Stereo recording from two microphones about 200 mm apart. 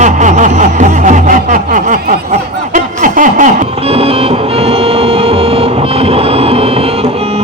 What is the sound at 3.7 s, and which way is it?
Music, 30° right (ahead or behind).